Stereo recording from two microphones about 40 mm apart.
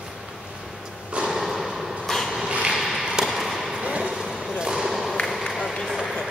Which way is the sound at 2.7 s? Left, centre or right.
Centre.